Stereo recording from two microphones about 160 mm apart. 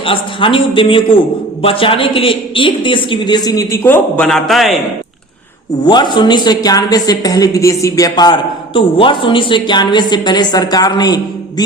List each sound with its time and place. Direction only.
0.0 s a man's voice: 35° left (ahead or behind); by 4.3 s 15° left (ahead or behind)
4.3 s a man's voice: centre (ahead or behind)
5.8 s a woman's voice: 30° left (ahead or behind)